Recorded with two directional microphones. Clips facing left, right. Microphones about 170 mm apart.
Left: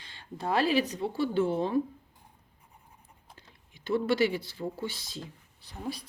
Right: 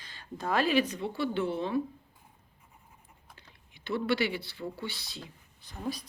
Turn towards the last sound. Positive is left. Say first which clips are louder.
# right 1 dB
turn(degrees=30)  # may be behind; listen again after turning